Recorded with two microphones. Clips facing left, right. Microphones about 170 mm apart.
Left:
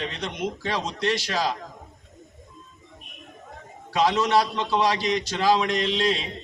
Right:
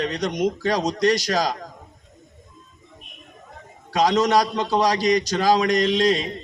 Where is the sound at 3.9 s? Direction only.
40° right (ahead or behind).